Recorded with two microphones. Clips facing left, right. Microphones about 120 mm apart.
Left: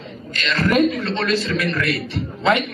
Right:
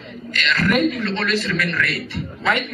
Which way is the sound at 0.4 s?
30° left (ahead or behind).